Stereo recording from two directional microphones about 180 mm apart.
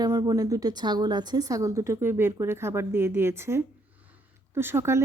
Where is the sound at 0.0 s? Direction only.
20° right (ahead or behind).